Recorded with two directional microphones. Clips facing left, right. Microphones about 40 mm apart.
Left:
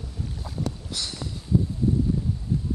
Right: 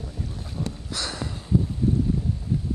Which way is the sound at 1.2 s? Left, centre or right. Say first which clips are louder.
Right 2 dB; right.